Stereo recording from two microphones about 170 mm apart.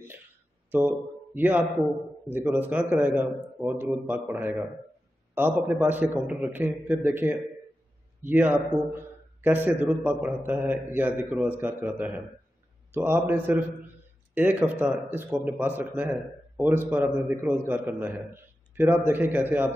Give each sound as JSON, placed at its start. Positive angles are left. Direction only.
{"t": 0.7, "sound": "a man's voice", "side_deg": -10}